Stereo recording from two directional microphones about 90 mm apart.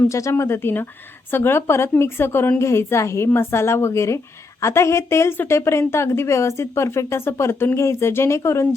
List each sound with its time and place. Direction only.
0.1 s a woman's voice: 35° left (ahead or behind)